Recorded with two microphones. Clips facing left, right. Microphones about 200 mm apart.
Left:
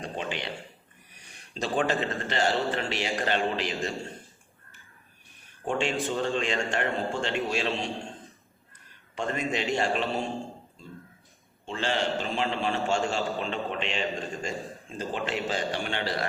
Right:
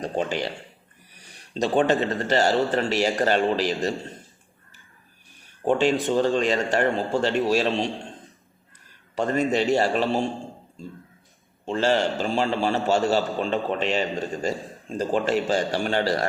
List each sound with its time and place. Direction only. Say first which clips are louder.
0.0 s speech: right 7 dB; 40° right (ahead or behind)
1.8 s a man's voice: right 4 dB; 40° right (ahead or behind)
5.8 s a man's voice: right 7 dB; 35° right (ahead or behind)
9.1 s a man's voice: right 7 dB; 40° right (ahead or behind)
11.7 s a man's voice: right 6 dB; 40° right (ahead or behind)